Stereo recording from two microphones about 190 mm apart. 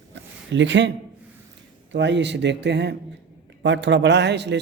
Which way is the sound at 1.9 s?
70° right (ahead or behind).